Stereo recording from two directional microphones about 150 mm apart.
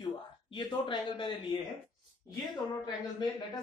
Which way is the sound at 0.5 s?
30° left (ahead or behind).